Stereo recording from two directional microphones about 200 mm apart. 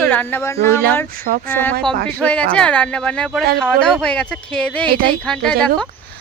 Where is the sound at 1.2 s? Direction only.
45° right (ahead or behind).